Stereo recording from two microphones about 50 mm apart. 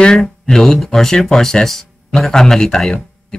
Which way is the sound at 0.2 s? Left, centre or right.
Centre.